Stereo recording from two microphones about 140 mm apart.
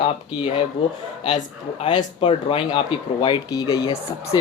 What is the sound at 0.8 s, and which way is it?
Speech, 40° left (ahead or behind).